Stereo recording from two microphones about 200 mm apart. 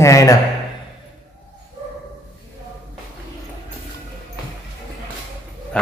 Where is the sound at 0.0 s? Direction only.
15° left (ahead or behind).